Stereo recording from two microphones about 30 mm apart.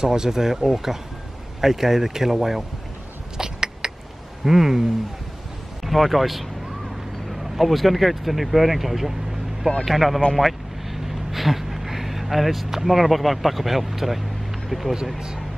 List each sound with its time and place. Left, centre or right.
0.0 s speech: right
3.3 s a sound: right
4.5 s speech: centre
5.9 s speech: centre
7.5 s speech: centre
10.3 s vehicle: centre
12.6 s speech: centre